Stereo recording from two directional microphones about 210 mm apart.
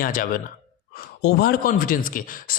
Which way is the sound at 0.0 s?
40° left (ahead or behind).